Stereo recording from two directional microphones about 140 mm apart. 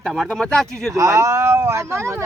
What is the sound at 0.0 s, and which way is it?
Speech, centre (ahead or behind).